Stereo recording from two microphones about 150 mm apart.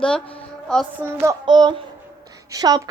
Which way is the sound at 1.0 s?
20° right (ahead or behind).